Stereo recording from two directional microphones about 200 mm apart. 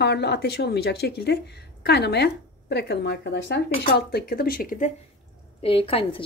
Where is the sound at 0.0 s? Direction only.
55° left (ahead or behind).